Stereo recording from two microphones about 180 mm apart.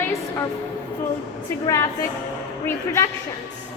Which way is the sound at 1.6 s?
15° left (ahead or behind).